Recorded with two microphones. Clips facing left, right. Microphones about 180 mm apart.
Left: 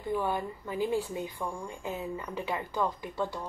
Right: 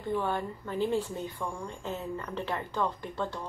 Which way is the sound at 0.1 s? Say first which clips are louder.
Even; 10° left (ahead or behind).